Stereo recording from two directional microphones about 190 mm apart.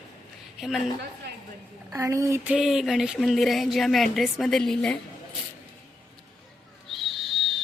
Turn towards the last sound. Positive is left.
turn(degrees=0)  # may be behind; listen again after turning